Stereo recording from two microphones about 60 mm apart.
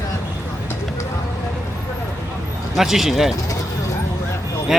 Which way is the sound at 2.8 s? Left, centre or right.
Centre.